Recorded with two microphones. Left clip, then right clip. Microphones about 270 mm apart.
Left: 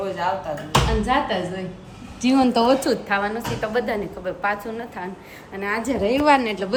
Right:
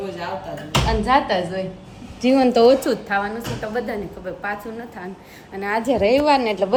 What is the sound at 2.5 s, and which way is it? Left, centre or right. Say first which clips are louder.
Speech: right 7 dB; left.